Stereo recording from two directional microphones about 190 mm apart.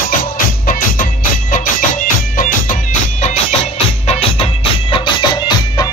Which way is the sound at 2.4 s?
45° left (ahead or behind).